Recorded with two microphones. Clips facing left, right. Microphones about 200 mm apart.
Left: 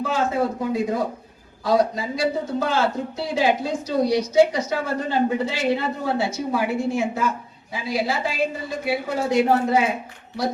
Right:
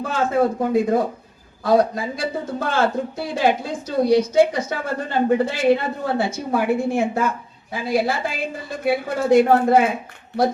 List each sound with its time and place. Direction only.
0.0 s a woman's voice: 55° right (ahead or behind)